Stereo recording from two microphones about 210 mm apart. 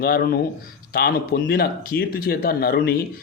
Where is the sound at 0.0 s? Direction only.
45° left (ahead or behind).